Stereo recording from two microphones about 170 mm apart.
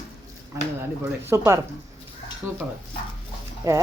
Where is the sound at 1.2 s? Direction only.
15° right (ahead or behind).